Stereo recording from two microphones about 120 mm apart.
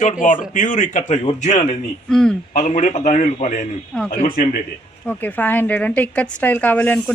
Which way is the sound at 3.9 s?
5° left (ahead or behind).